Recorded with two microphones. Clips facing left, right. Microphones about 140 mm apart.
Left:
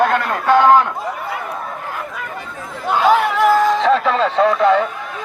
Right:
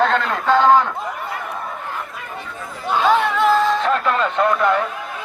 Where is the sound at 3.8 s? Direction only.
90° left.